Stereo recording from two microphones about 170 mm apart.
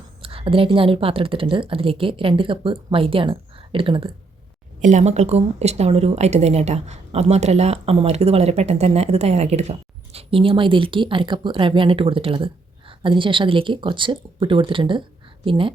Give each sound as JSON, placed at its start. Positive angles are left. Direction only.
{"t": 0.2, "sound": "speech", "side_deg": -30}
{"t": 4.8, "sound": "speech", "side_deg": -45}